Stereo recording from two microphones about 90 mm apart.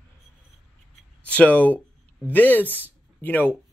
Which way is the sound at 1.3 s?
15° left (ahead or behind).